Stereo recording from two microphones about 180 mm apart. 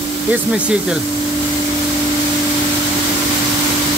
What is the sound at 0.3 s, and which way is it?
Speech, 5° right (ahead or behind).